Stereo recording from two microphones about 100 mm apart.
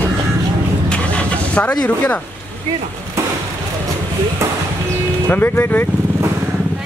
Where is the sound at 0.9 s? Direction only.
15° left (ahead or behind).